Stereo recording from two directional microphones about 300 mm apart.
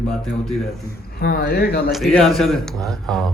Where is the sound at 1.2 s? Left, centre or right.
Left.